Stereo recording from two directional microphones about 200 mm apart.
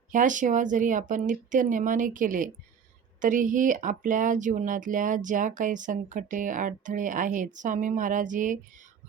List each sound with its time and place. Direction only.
0.1 s speech: 40° right (ahead or behind)